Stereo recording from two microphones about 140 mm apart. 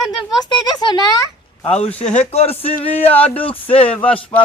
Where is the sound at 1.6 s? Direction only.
50° left (ahead or behind).